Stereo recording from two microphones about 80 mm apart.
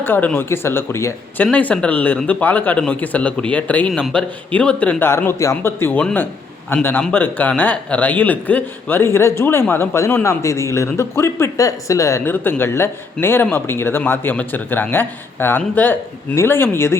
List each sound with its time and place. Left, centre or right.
0.0 s a man's voice: left
1.5 s a man's voice: centre
4.9 s speech: left
7.1 s a man's voice: left
12.2 s a man's voice: left